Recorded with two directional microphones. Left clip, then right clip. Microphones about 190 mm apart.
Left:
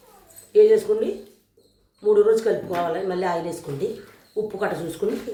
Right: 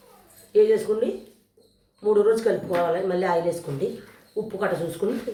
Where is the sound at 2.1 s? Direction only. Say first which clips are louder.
Left 2 dB; centre (ahead or behind).